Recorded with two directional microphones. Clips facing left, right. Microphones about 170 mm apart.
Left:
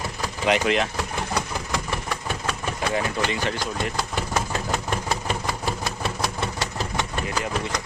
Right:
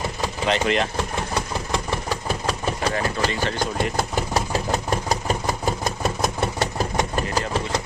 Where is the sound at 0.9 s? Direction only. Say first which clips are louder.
Right 2 dB; 25° right (ahead or behind).